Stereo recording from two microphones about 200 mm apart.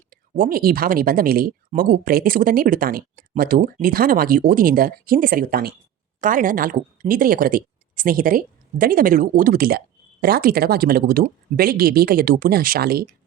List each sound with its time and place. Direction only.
0.1 s a woman's voice: 45° right (ahead or behind)